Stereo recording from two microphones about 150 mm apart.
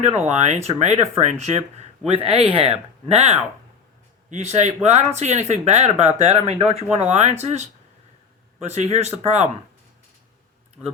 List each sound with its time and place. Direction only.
0.0 s speech: 50° right (ahead or behind)
10.8 s speech: 5° right (ahead or behind)